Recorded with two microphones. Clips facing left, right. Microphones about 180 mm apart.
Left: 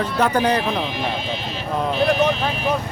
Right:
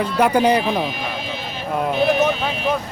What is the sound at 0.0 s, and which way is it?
Speech, 10° right (ahead or behind).